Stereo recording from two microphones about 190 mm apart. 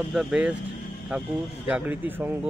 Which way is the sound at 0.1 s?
Centre (ahead or behind).